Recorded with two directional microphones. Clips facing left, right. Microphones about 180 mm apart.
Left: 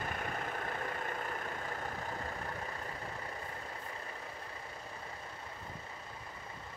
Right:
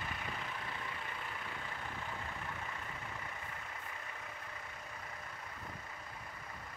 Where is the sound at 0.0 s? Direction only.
50° left (ahead or behind).